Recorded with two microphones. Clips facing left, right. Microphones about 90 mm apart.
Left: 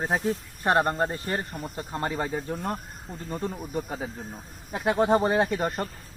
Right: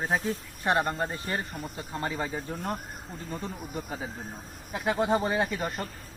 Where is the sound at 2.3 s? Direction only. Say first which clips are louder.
Left 3 dB; 15° left (ahead or behind).